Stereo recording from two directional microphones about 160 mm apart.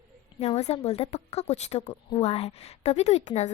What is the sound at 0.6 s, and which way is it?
A woman's voice, 40° left (ahead or behind).